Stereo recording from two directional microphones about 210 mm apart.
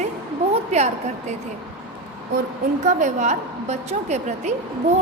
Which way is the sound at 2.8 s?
35° right (ahead or behind).